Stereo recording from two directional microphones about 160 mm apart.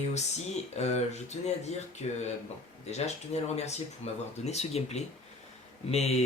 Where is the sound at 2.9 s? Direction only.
40° left (ahead or behind).